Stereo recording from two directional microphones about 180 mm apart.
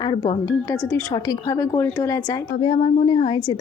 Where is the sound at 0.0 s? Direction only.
20° left (ahead or behind).